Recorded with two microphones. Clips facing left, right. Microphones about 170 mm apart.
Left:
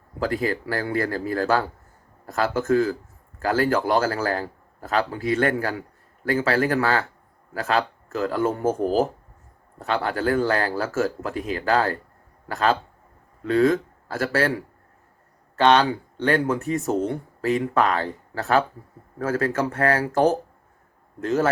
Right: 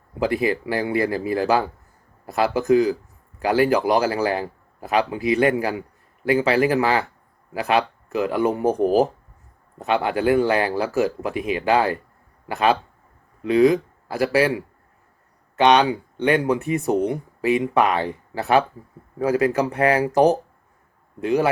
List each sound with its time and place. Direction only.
0.2 s speech: 15° right (ahead or behind)
15.5 s speech: 15° right (ahead or behind)